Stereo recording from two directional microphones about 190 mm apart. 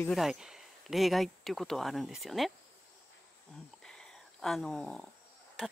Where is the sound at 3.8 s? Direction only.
5° left (ahead or behind).